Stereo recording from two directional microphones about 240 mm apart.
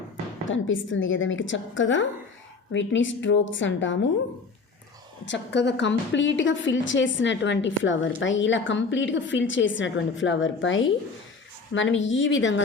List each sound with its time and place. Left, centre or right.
0.4 s a woman's voice: left
5.2 s a woman's voice: left